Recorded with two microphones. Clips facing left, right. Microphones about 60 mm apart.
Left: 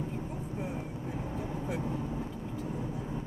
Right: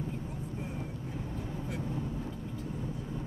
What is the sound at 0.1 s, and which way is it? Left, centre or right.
Vehicle, centre.